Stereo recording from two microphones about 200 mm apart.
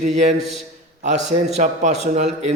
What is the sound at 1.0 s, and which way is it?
A man's voice, 35° right (ahead or behind).